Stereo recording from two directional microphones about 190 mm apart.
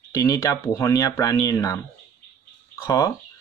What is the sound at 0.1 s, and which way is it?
Speech, 20° left (ahead or behind).